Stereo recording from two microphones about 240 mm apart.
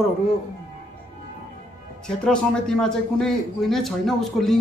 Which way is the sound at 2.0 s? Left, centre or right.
Centre.